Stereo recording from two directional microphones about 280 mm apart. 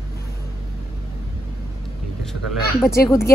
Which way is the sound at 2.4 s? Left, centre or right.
Centre.